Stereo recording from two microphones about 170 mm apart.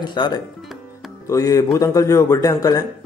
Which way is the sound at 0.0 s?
25° left (ahead or behind).